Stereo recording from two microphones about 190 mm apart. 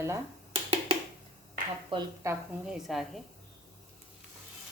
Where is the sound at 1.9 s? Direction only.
25° right (ahead or behind).